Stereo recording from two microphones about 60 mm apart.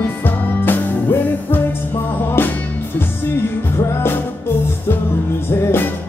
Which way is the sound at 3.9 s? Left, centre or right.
Left.